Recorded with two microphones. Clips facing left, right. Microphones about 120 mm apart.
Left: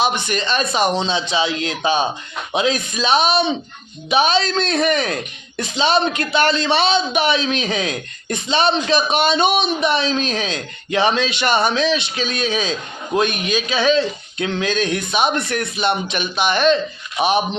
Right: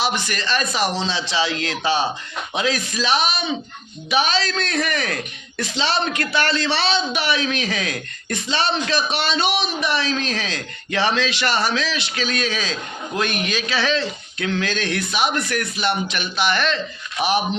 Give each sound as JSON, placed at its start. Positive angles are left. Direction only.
{"t": 0.0, "sound": "speech", "side_deg": 20}